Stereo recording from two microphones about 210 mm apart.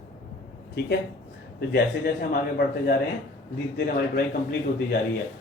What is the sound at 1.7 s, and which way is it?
Speech, 45° left (ahead or behind).